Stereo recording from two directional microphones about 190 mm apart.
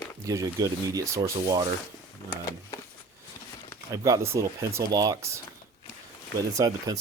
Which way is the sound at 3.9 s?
15° right (ahead or behind).